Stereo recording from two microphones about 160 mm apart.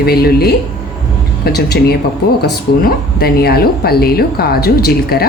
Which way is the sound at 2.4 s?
75° left (ahead or behind).